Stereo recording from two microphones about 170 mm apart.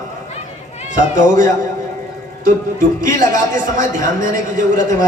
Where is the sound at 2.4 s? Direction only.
50° right (ahead or behind).